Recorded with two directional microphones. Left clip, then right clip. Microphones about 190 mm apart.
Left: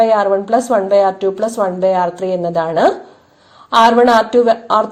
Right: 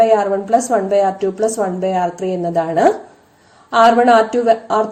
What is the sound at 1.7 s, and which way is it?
Speech, 35° left (ahead or behind).